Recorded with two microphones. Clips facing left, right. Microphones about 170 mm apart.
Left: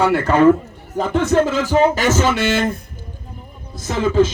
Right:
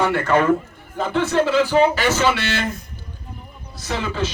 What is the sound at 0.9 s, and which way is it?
Speech, 45° left (ahead or behind).